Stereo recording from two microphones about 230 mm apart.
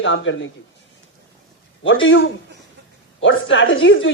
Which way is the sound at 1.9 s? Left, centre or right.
Left.